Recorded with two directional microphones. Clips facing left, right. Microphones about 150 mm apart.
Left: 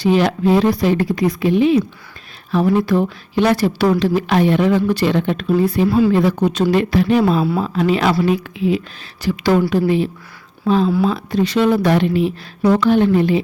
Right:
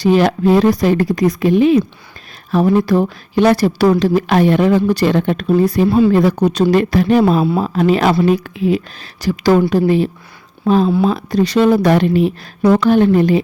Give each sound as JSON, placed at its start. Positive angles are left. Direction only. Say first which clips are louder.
{"t": 0.0, "sound": "speech", "louder": "right 3 dB", "side_deg": -45}
{"t": 10.8, "sound": "speech", "louder": "right 2 dB", "side_deg": -25}
{"t": 11.1, "sound": "speech", "louder": "right 3 dB", "side_deg": -40}